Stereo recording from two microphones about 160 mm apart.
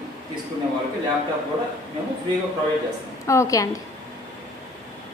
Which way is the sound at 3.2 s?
20° left (ahead or behind).